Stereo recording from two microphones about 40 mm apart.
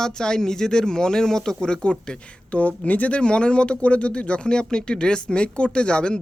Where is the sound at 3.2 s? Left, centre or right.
Left.